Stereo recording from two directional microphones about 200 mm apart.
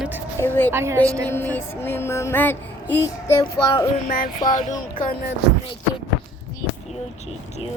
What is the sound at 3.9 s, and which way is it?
Music, 40° left (ahead or behind).